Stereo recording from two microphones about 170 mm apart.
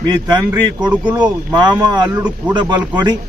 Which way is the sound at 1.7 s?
25° right (ahead or behind).